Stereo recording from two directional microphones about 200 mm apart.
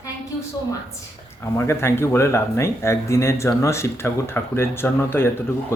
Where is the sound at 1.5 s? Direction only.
10° left (ahead or behind).